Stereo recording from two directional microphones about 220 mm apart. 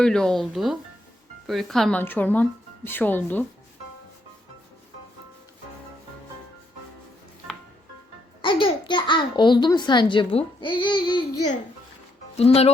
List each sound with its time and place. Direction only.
0.0 s speech: 5° left (ahead or behind)
8.4 s a child's voice: 25° left (ahead or behind)
12.4 s a child's voice: 30° left (ahead or behind)